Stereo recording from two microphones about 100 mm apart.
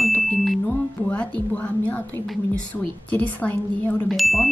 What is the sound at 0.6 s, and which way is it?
A woman's voice, 15° left (ahead or behind).